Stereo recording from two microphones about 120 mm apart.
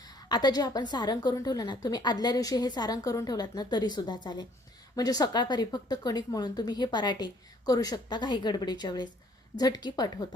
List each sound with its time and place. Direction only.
0.3 s a woman's voice: 35° left (ahead or behind)